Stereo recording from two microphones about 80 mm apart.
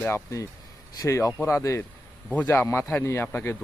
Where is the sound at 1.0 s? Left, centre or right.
Left.